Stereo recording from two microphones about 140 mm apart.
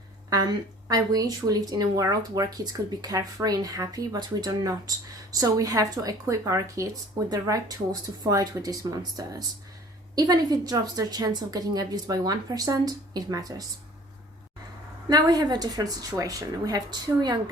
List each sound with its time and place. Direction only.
0.9 s speech: 25° right (ahead or behind)
15.1 s speech: 30° right (ahead or behind)